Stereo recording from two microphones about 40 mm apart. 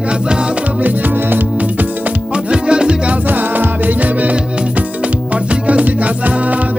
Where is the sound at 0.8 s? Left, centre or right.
Right.